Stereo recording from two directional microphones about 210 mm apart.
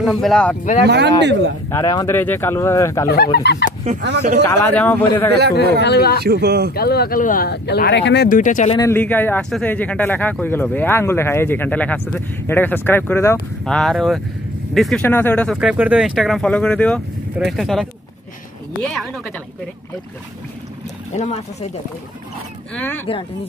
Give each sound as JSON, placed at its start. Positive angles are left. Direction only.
{"t": 0.0, "sound": "speech", "side_deg": 0}
{"t": 0.8, "sound": "speech", "side_deg": -55}
{"t": 1.7, "sound": "speech", "side_deg": 15}
{"t": 3.1, "sound": "speech", "side_deg": 45}
{"t": 4.0, "sound": "speech", "side_deg": -55}
{"t": 4.5, "sound": "speech", "side_deg": 10}
{"t": 5.8, "sound": "speech", "side_deg": 50}
{"t": 6.2, "sound": "speech", "side_deg": -50}
{"t": 6.7, "sound": "speech", "side_deg": 50}
{"t": 8.3, "sound": "speech", "side_deg": 40}
{"t": 8.7, "sound": "speech", "side_deg": 10}
{"t": 21.1, "sound": "speech", "side_deg": 35}
{"t": 22.8, "sound": "speech", "side_deg": 10}